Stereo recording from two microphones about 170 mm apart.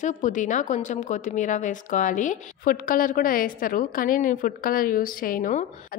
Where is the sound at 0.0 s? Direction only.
45° left (ahead or behind).